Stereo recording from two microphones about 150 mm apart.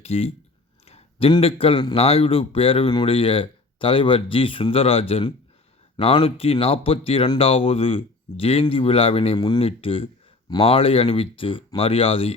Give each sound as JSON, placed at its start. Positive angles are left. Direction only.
{"t": 0.0, "sound": "speech", "side_deg": 45}
{"t": 0.9, "sound": "a sound", "side_deg": 40}
{"t": 1.3, "sound": "speech", "side_deg": 40}